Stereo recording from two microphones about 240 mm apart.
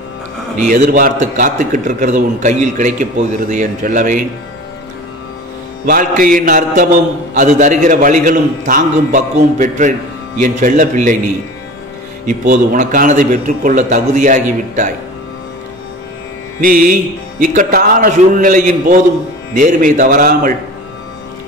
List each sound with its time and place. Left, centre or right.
0.7 s a man's voice: right
5.9 s a man's voice: right
12.3 s a man's voice: right
16.6 s a man's voice: right